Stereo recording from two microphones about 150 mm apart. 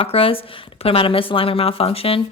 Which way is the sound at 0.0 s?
40° left (ahead or behind).